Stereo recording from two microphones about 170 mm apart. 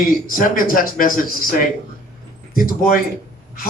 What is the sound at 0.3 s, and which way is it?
Speech, 55° left (ahead or behind).